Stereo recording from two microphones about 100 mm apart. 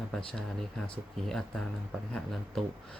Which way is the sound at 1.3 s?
5° left (ahead or behind).